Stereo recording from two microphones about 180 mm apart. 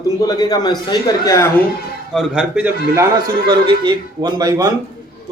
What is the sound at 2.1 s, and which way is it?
Speech, 5° right (ahead or behind).